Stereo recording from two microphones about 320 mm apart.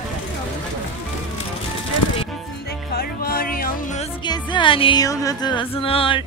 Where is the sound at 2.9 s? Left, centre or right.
Left.